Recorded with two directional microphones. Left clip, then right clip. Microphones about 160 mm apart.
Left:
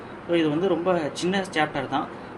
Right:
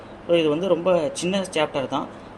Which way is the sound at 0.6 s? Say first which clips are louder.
Right 3 dB; 50° right (ahead or behind).